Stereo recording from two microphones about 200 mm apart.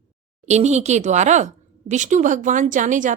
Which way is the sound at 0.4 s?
35° right (ahead or behind).